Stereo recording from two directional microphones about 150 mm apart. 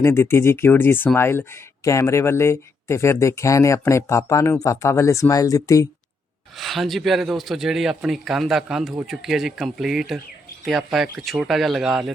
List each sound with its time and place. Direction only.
0.0 s speech: 15° left (ahead or behind)
6.6 s a man's voice: centre (ahead or behind)